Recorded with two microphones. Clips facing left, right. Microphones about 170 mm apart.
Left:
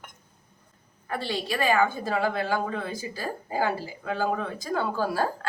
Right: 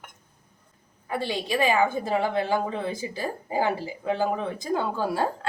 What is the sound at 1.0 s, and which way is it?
A woman's voice, 15° right (ahead or behind).